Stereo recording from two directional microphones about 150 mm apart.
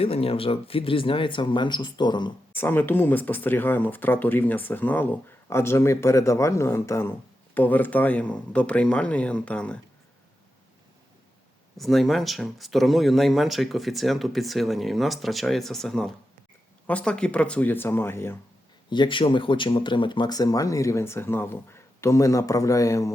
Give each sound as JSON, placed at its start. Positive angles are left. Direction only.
{"t": 0.0, "sound": "speech", "side_deg": 40}
{"t": 2.6, "sound": "speech", "side_deg": 10}
{"t": 11.8, "sound": "speech", "side_deg": 0}
{"t": 18.9, "sound": "speech", "side_deg": 30}